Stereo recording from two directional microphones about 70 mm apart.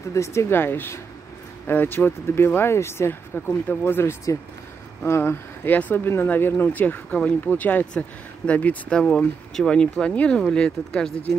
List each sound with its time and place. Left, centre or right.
0.1 s speech: left; by 11.1 s centre